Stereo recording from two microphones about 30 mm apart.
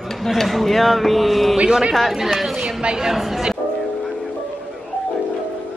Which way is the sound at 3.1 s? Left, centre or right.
Centre.